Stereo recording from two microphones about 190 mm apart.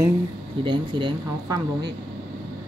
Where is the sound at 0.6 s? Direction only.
25° right (ahead or behind).